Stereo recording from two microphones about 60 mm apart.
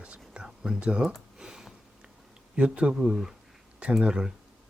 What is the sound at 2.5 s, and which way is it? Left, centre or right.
Speech, centre.